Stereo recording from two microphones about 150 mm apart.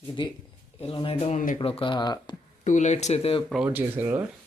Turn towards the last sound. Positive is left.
turn(degrees=-10)  # may be behind; listen again after turning